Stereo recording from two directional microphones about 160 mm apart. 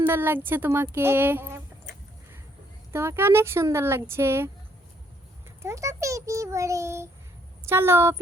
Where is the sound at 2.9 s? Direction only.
15° right (ahead or behind).